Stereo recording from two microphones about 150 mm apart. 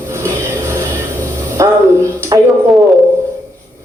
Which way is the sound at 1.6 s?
20° right (ahead or behind).